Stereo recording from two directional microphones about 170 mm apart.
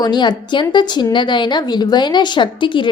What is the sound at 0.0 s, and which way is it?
A woman's voice, 25° left (ahead or behind).